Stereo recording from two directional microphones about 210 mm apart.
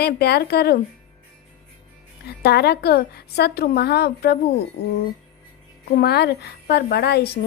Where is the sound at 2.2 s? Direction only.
50° left (ahead or behind).